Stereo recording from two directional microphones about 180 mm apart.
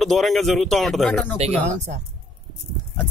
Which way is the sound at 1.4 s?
40° right (ahead or behind).